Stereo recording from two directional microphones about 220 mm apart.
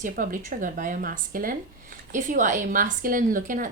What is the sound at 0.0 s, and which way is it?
A woman's voice, 40° right (ahead or behind).